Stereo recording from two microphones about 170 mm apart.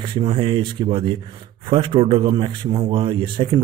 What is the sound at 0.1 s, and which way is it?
A man's voice, 30° right (ahead or behind).